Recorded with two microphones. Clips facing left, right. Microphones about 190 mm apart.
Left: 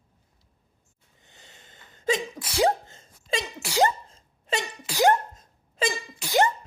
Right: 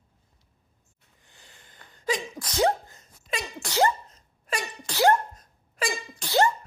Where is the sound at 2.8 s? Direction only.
25° left (ahead or behind).